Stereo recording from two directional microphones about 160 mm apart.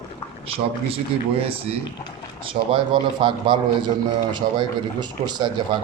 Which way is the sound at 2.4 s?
30° right (ahead or behind).